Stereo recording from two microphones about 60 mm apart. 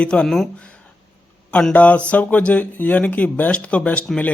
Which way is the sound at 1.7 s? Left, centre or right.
Left.